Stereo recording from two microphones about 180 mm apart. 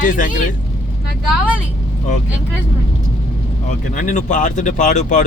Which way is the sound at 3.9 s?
45° left (ahead or behind).